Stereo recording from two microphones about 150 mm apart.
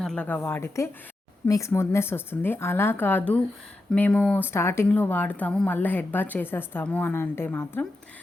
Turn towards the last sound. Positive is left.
turn(degrees=10)  # may be behind; listen again after turning